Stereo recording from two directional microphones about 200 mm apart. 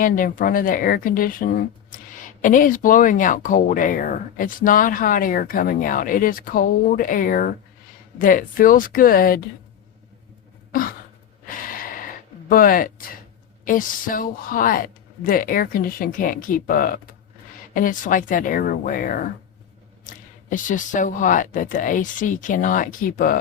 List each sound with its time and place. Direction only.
0.0 s speech: 45° left (ahead or behind)
10.7 s a sound: 45° left (ahead or behind)
13.7 s speech: 40° left (ahead or behind)